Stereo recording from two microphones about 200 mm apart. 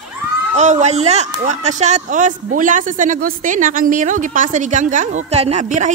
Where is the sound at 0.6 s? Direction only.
35° right (ahead or behind).